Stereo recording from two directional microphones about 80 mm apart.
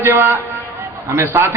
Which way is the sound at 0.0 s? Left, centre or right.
Right.